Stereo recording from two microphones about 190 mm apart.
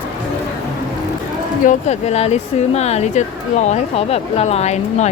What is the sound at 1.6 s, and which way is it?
Speech, 35° left (ahead or behind).